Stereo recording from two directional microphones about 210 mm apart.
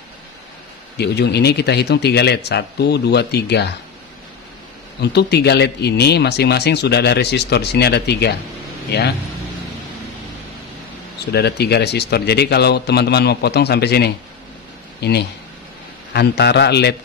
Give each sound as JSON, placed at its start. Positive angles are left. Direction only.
{"t": 0.9, "sound": "speech", "side_deg": 50}
{"t": 5.0, "sound": "speech", "side_deg": 50}
{"t": 11.3, "sound": "speech", "side_deg": 50}